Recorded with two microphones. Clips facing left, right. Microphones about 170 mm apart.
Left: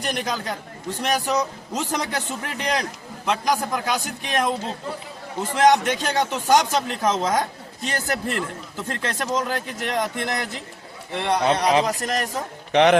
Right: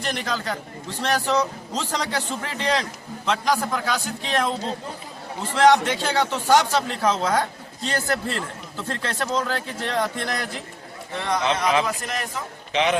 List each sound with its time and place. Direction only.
0.0 s a man's voice: 15° left (ahead or behind)
11.2 s a man's voice: 30° left (ahead or behind)
12.7 s a man's voice: 65° left (ahead or behind)